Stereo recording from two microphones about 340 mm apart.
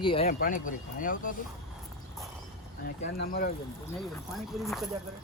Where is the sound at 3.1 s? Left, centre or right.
Left.